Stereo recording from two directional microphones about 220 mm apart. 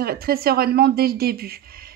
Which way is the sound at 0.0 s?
45° right (ahead or behind).